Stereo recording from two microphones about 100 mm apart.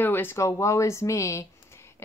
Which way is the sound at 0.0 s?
20° left (ahead or behind).